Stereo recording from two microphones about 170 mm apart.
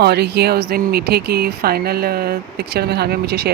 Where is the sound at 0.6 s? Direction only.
65° right (ahead or behind).